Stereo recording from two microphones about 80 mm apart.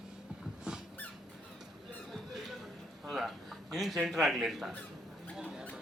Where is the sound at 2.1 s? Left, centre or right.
Centre.